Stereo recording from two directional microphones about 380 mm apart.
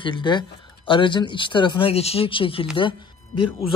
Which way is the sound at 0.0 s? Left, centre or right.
Centre.